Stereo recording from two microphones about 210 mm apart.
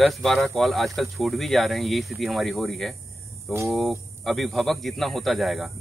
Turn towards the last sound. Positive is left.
turn(degrees=0)  # may be behind; listen again after turning